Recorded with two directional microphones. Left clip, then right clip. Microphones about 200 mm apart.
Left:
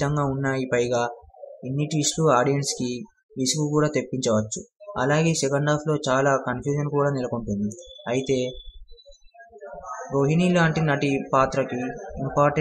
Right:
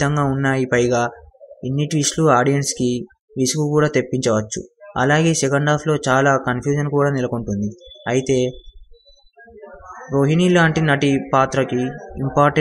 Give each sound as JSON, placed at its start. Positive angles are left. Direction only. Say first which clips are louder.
{"t": 0.0, "sound": "speech", "louder": "right 6 dB", "side_deg": -25}
{"t": 10.1, "sound": "speech", "louder": "right 6 dB", "side_deg": -30}